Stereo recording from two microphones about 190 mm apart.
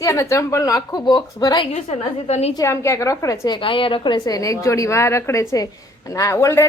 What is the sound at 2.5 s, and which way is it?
A woman's voice, 15° left (ahead or behind).